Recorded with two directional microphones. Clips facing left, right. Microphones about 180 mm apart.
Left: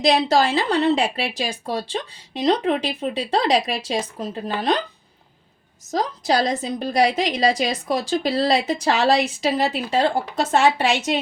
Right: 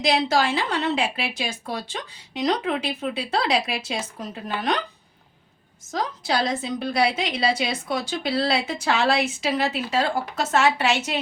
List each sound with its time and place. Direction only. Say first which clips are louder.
0.0 s a woman's voice: left 4 dB; 35° left (ahead or behind)
5.9 s a woman's voice: left 4 dB; 40° left (ahead or behind)